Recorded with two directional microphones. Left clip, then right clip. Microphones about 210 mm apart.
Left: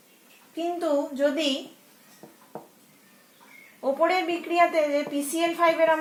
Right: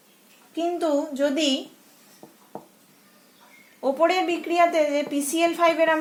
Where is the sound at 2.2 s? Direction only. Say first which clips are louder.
Right 1 dB; 10° right (ahead or behind).